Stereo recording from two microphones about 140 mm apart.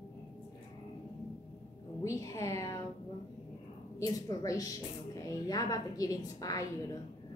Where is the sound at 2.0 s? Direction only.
25° left (ahead or behind).